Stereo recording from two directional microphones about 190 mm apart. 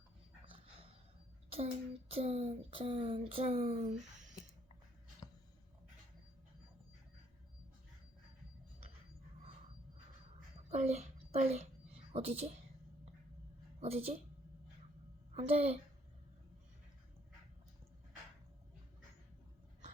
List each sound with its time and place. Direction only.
1.5 s speech: 30° right (ahead or behind)
10.7 s a sound: 35° right (ahead or behind)
12.1 s a woman's voice: 30° right (ahead or behind)
13.7 s a woman's voice: 30° right (ahead or behind)
15.4 s a woman's voice: 35° right (ahead or behind)